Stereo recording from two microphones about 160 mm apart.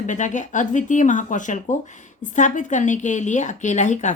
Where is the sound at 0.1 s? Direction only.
50° left (ahead or behind).